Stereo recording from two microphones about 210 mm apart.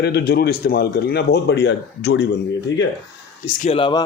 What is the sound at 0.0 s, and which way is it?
Speech, 50° left (ahead or behind).